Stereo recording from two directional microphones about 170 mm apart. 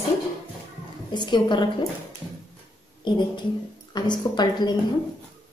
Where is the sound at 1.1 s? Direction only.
25° left (ahead or behind).